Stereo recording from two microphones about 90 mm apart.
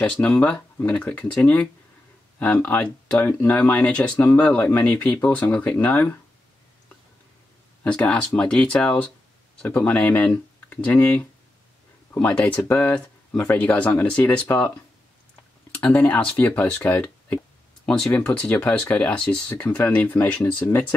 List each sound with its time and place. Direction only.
0.0 s speech: 10° left (ahead or behind)
7.8 s speech: 15° left (ahead or behind)
15.7 s speech: 15° left (ahead or behind)
17.8 s speech: 10° left (ahead or behind)